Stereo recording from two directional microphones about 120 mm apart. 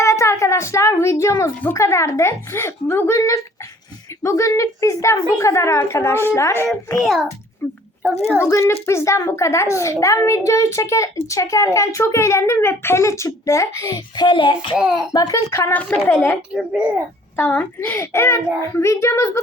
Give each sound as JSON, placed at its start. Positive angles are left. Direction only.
{"t": 0.0, "sound": "a woman's voice", "side_deg": 25}
{"t": 7.0, "sound": "a child's voice", "side_deg": -5}
{"t": 7.6, "sound": "a woman's voice", "side_deg": 15}
{"t": 14.8, "sound": "a child's voice", "side_deg": -5}
{"t": 15.1, "sound": "a woman's voice", "side_deg": 30}
{"t": 15.7, "sound": "a woman's voice", "side_deg": 15}
{"t": 16.5, "sound": "a child's voice", "side_deg": -10}
{"t": 17.3, "sound": "a woman's voice", "side_deg": 15}